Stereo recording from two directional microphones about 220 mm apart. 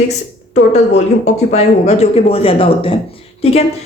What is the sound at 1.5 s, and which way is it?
Speech, 30° left (ahead or behind).